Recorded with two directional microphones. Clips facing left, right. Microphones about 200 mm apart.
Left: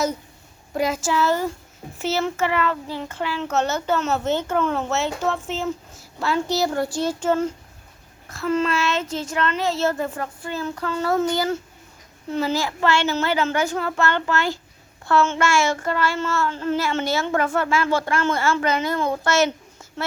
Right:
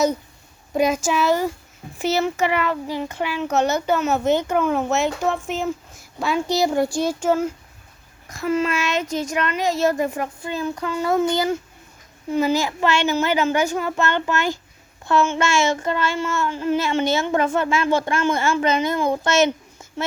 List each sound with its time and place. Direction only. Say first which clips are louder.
0.7 s a child's voice: right 3 dB; 15° right (ahead or behind)
15.0 s child singing: even; 15° right (ahead or behind)